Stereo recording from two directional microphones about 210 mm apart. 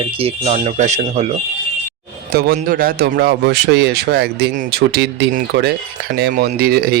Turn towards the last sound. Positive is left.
turn(degrees=-45)  # may be behind; listen again after turning